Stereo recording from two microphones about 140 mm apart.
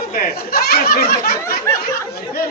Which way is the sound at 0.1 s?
90° left.